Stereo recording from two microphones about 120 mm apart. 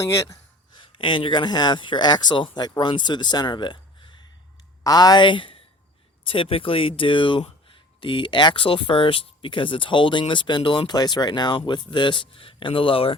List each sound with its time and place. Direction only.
0.0 s speech: 25° left (ahead or behind)
0.9 s speech: 45° left (ahead or behind)